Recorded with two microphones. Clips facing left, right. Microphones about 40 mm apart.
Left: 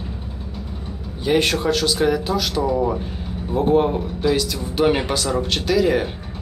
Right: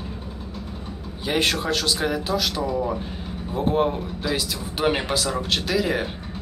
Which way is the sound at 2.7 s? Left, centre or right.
Centre.